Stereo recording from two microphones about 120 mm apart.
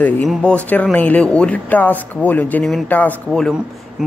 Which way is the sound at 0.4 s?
10° left (ahead or behind).